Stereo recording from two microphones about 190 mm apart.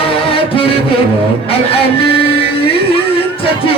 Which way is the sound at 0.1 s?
30° left (ahead or behind).